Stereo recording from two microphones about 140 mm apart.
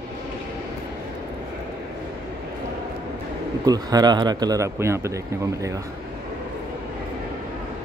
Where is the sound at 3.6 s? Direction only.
25° right (ahead or behind).